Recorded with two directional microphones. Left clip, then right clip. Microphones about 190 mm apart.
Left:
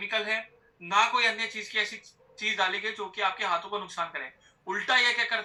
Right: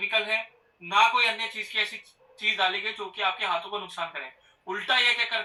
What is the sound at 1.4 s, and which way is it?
Speech, 20° left (ahead or behind).